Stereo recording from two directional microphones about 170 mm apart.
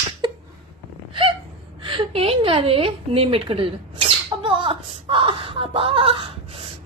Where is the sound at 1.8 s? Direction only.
30° right (ahead or behind).